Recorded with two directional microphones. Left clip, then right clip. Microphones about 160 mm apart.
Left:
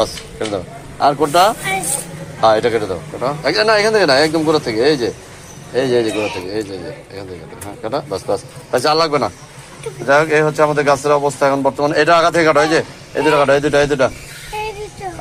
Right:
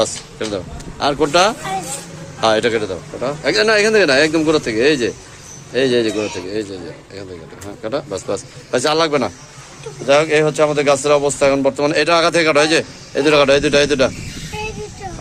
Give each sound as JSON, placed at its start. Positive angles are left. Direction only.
{"t": 0.0, "sound": "a man's voice", "side_deg": -20}
{"t": 3.4, "sound": "a man's voice", "side_deg": -45}
{"t": 3.8, "sound": "speech", "side_deg": -25}